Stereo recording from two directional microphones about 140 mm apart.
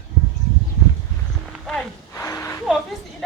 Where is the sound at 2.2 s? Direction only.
20° left (ahead or behind).